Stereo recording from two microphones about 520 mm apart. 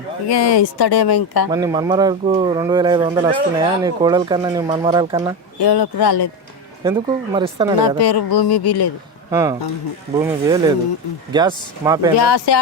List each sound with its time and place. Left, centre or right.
0.3 s speech: left
1.5 s speech: centre
5.5 s speech: left
6.8 s speech: centre
7.9 s speech: left
9.3 s speech: centre
12.1 s speech: left